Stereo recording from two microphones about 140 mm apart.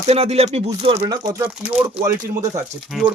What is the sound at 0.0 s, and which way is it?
Speech, 50° right (ahead or behind).